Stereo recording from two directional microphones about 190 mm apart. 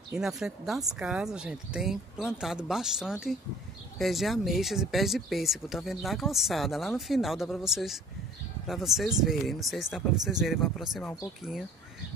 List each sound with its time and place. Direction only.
0.1 s speech: 5° right (ahead or behind)